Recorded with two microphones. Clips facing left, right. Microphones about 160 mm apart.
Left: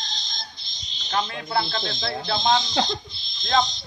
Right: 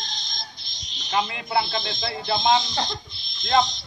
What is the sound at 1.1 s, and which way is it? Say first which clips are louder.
Speech: right 1 dB; 10° right (ahead or behind).